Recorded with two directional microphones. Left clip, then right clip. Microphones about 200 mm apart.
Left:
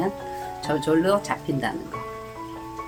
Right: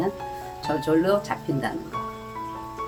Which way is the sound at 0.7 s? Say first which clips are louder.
Even; 15° left (ahead or behind).